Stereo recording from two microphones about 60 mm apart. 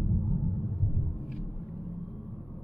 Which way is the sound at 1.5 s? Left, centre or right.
Centre.